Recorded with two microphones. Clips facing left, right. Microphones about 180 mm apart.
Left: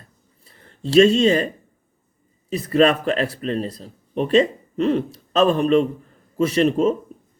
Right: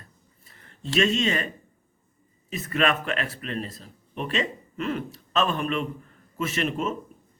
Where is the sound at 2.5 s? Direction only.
35° left (ahead or behind).